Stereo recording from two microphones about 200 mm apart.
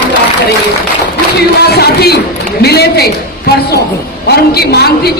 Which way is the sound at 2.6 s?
55° left (ahead or behind).